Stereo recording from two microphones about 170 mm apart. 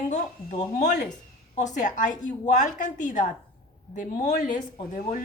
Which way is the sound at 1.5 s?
45° left (ahead or behind).